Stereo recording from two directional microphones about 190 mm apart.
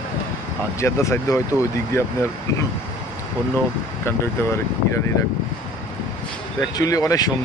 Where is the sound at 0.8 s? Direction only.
15° left (ahead or behind).